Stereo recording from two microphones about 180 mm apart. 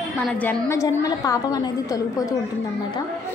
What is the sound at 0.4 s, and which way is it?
A woman's voice, 15° left (ahead or behind).